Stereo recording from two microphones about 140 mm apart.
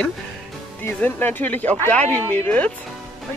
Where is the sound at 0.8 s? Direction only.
15° left (ahead or behind).